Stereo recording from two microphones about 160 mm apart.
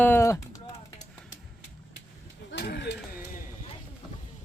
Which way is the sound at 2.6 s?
90° left.